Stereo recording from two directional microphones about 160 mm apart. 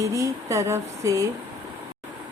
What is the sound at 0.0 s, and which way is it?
A woman's voice, 20° right (ahead or behind).